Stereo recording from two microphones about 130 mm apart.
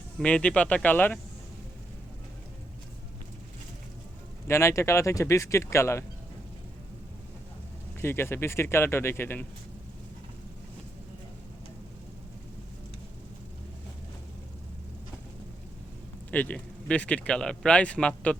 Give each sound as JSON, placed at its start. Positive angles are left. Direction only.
{"t": 0.2, "sound": "speech", "side_deg": 10}
{"t": 4.4, "sound": "speech", "side_deg": 20}
{"t": 7.9, "sound": "speech", "side_deg": 20}
{"t": 16.3, "sound": "speech", "side_deg": 10}